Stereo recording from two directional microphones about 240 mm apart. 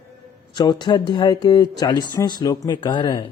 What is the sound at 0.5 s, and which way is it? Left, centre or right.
Speech, centre.